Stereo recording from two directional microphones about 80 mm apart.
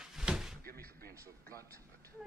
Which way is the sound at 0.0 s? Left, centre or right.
Centre.